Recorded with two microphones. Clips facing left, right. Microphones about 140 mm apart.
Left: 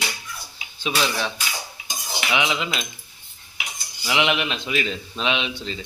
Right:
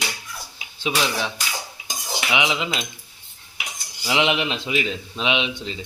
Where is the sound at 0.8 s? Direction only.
15° right (ahead or behind).